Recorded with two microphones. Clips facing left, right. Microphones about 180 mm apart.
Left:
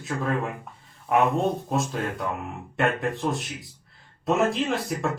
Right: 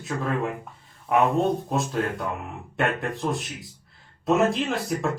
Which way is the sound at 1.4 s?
Centre (ahead or behind).